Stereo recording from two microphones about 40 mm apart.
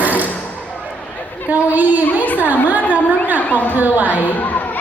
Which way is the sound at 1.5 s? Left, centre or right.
Right.